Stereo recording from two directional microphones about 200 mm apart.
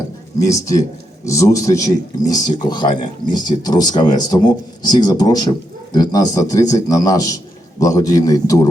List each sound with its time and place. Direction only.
0.4 s a man's voice: 15° left (ahead or behind)